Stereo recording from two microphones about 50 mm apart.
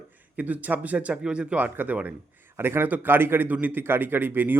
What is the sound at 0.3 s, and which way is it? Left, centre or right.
Speech, right.